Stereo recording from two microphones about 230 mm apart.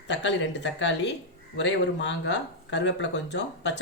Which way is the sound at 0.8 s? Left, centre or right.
Left.